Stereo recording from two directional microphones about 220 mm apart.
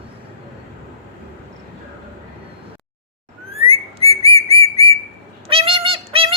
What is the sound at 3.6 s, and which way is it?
Whistling, 25° right (ahead or behind).